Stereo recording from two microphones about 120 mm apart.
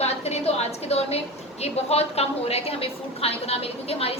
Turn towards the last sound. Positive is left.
turn(degrees=55)  # may be behind; listen again after turning